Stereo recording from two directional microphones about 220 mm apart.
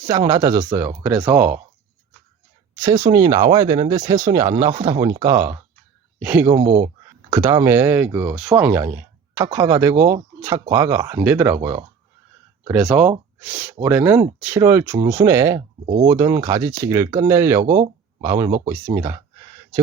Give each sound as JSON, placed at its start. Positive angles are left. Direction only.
{"t": 0.1, "sound": "speech", "side_deg": -15}
{"t": 2.8, "sound": "speech", "side_deg": -15}
{"t": 6.7, "sound": "speech", "side_deg": -30}
{"t": 7.3, "sound": "speech", "side_deg": -15}